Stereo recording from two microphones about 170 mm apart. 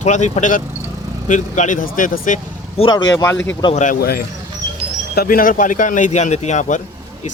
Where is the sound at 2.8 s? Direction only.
30° left (ahead or behind).